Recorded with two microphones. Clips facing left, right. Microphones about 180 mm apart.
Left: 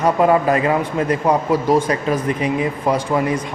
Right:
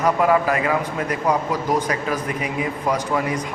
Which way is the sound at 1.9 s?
30° left (ahead or behind).